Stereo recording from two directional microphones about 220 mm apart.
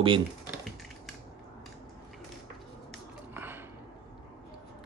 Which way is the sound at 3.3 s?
10° right (ahead or behind).